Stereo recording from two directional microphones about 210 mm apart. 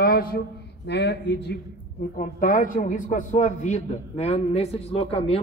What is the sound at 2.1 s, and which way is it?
Speech, 40° left (ahead or behind).